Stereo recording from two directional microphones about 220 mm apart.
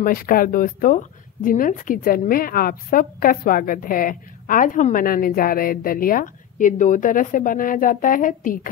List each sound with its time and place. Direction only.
0.0 s speech: 40° left (ahead or behind)